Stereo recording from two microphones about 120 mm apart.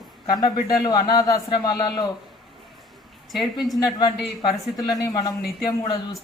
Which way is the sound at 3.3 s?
Centre (ahead or behind).